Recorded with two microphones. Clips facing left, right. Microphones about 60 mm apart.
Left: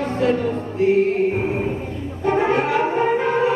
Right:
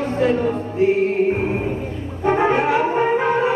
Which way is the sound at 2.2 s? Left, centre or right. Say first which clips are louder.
Right 2 dB; centre.